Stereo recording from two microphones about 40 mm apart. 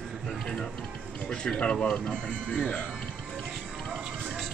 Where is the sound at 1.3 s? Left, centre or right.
Left.